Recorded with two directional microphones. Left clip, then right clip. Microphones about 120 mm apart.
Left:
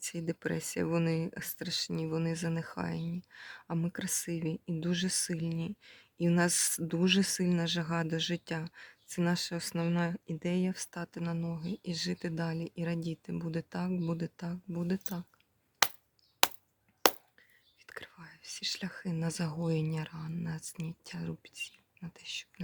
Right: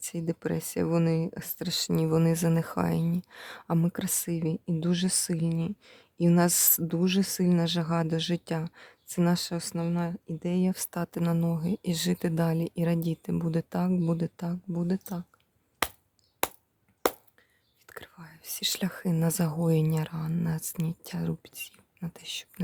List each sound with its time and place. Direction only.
0.0 s speech: 45° right (ahead or behind)
7.0 s speech: 30° right (ahead or behind)
17.8 s whispering: 35° right (ahead or behind)
18.4 s speech: 70° right (ahead or behind)